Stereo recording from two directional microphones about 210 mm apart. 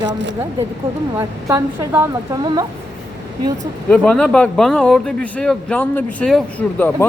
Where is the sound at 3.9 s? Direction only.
5° left (ahead or behind).